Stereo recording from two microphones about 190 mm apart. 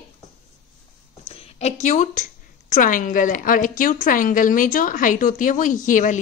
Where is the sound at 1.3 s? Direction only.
30° left (ahead or behind).